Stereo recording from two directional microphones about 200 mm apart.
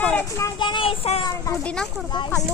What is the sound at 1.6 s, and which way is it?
Speech, 5° left (ahead or behind).